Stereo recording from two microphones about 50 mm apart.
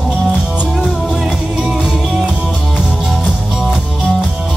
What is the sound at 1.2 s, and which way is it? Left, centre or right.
Music, centre.